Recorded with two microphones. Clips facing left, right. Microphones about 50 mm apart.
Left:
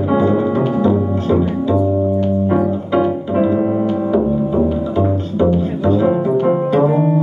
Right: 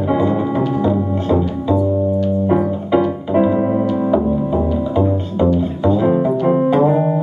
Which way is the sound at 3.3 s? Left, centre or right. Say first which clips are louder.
Right 3 dB; centre.